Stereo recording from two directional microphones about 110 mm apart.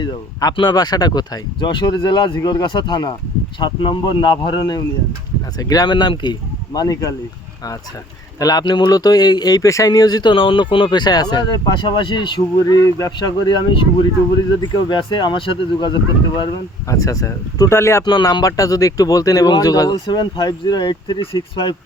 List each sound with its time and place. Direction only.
0.0 s speech: 35° left (ahead or behind)
8.4 s speech: 35° left (ahead or behind)
16.9 s speech: 30° left (ahead or behind)
18.0 s speech: 40° left (ahead or behind)